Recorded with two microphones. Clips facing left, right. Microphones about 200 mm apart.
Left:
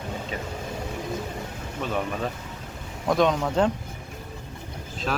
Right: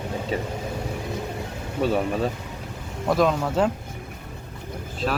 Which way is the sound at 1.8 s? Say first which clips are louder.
Right 6 dB; 35° right (ahead or behind).